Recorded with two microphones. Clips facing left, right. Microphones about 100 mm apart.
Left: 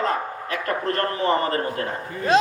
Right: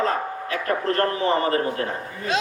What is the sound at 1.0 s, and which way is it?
Speech, 40° left (ahead or behind).